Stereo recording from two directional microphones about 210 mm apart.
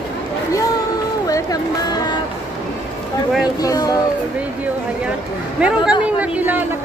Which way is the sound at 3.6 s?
15° left (ahead or behind).